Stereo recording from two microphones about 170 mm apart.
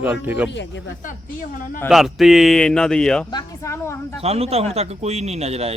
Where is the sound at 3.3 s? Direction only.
15° left (ahead or behind).